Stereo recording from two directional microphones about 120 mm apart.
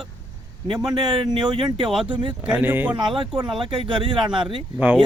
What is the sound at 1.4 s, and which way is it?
Speech, 5° right (ahead or behind).